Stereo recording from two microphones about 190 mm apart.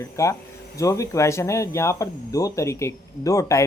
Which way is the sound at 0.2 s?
15° left (ahead or behind).